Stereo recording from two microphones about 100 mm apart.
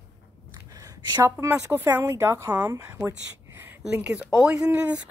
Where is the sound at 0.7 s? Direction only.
35° right (ahead or behind).